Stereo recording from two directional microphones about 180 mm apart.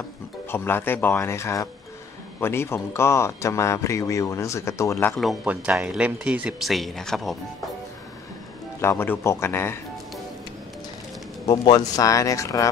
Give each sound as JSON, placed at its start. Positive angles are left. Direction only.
{"t": 0.5, "sound": "a man's voice", "side_deg": 10}
{"t": 5.1, "sound": "speech", "side_deg": 0}
{"t": 8.8, "sound": "a man's voice", "side_deg": 10}
{"t": 11.4, "sound": "speech", "side_deg": 25}